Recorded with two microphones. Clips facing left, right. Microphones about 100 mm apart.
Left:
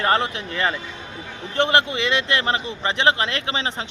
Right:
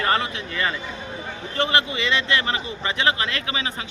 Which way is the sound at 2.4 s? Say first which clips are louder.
Left 3 dB; 35° left (ahead or behind).